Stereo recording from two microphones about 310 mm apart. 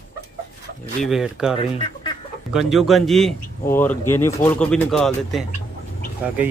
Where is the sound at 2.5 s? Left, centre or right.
Centre.